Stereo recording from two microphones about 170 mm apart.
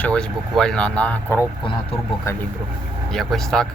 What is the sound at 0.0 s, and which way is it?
Speech, 5° left (ahead or behind).